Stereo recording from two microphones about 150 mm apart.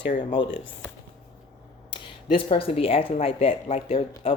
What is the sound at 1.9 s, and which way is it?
Speech, 35° left (ahead or behind).